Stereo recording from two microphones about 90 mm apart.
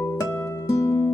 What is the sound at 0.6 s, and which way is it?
Music, 35° left (ahead or behind).